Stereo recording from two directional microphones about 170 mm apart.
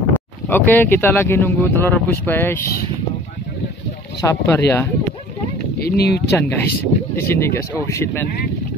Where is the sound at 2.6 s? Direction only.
60° left (ahead or behind).